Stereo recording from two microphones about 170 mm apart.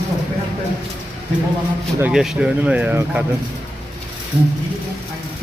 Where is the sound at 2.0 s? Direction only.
5° right (ahead or behind).